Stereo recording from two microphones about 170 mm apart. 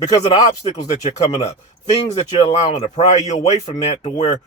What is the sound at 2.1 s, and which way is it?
Speech, 35° left (ahead or behind).